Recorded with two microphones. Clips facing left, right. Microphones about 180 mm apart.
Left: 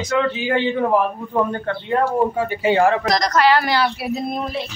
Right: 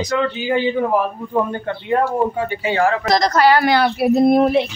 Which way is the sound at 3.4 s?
50° right (ahead or behind).